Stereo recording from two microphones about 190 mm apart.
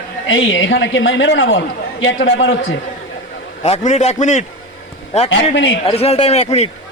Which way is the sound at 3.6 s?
35° left (ahead or behind).